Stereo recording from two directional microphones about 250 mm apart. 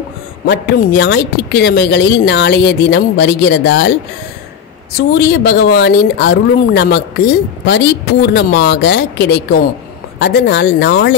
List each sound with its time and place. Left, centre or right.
0.5 s speech: left
4.9 s speech: left